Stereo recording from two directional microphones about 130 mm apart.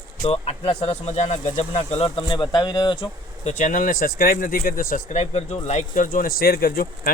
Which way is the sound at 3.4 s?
75° left (ahead or behind).